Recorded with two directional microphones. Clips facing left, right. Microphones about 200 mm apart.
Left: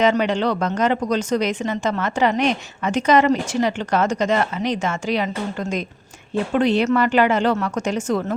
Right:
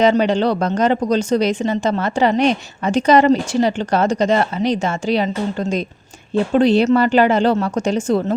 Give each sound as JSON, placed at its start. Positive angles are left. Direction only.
{"t": 0.0, "sound": "speech", "side_deg": -35}